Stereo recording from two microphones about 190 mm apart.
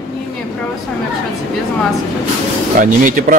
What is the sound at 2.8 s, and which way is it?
Speech, 45° right (ahead or behind).